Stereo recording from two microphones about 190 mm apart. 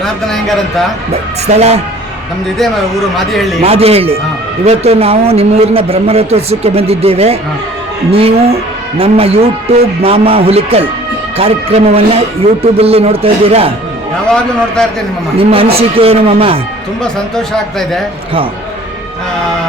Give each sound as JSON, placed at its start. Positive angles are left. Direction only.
{"t": 0.0, "sound": "speech", "side_deg": 0}
{"t": 1.1, "sound": "speech", "side_deg": -35}
{"t": 3.6, "sound": "speech", "side_deg": -30}
{"t": 14.8, "sound": "speech", "side_deg": 5}
{"t": 15.4, "sound": "speech", "side_deg": -30}
{"t": 17.0, "sound": "speech", "side_deg": 0}